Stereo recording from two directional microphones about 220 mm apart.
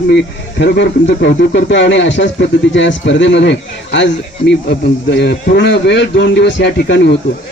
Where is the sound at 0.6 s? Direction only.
50° left (ahead or behind).